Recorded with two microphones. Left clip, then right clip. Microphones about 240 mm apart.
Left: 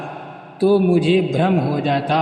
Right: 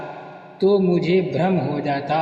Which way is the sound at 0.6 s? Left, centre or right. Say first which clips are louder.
Left 2 dB; left.